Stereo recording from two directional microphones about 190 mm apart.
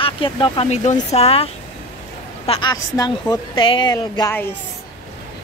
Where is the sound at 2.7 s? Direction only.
20° left (ahead or behind).